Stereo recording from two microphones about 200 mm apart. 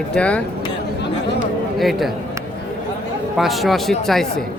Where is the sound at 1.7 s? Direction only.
Centre (ahead or behind).